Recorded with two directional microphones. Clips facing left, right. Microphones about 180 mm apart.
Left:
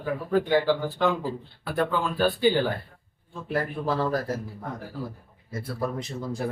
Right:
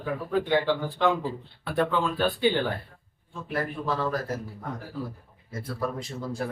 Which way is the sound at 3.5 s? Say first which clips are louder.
Left 2 dB; 35° left (ahead or behind).